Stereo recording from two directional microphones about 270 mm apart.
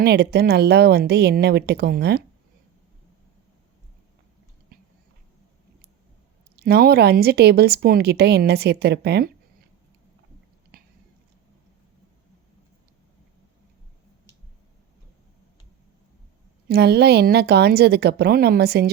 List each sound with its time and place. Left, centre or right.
0.0 s speech: right
6.6 s speech: right
10.7 s biting: right
16.6 s speech: right